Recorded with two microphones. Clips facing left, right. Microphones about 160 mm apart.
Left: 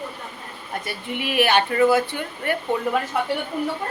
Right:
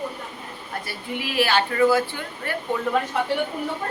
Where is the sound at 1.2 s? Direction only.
15° left (ahead or behind).